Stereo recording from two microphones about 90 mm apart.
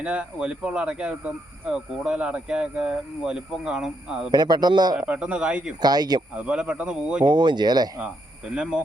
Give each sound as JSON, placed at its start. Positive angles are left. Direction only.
{"t": 0.0, "sound": "speech", "side_deg": -10}
{"t": 4.3, "sound": "a man's voice", "side_deg": -50}
{"t": 5.0, "sound": "speech", "side_deg": -15}
{"t": 5.8, "sound": "a man's voice", "side_deg": -50}
{"t": 6.3, "sound": "speech", "side_deg": -10}
{"t": 7.3, "sound": "a man's voice", "side_deg": -55}
{"t": 8.5, "sound": "speech", "side_deg": -10}